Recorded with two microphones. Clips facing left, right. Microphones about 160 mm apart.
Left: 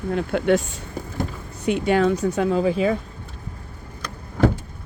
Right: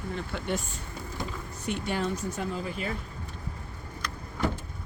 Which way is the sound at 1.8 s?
85° left.